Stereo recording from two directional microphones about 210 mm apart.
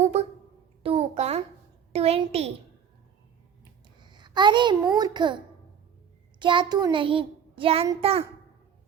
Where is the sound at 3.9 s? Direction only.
20° right (ahead or behind).